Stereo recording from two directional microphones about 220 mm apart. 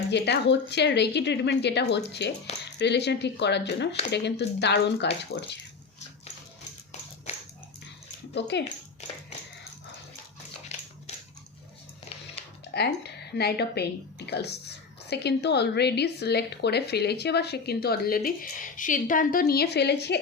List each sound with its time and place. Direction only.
0.1 s speech: 50° left (ahead or behind)
7.3 s dog: 30° left (ahead or behind)
8.4 s speech: 50° left (ahead or behind)
12.7 s speech: 50° left (ahead or behind)